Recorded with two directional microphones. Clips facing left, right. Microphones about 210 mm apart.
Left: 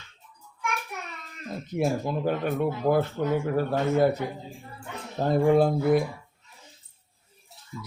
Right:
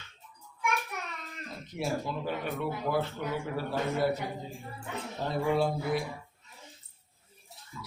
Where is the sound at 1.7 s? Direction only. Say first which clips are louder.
Left 6 dB; 50° left (ahead or behind).